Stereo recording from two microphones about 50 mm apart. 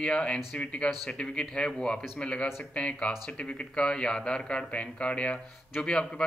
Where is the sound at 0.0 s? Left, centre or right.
Centre.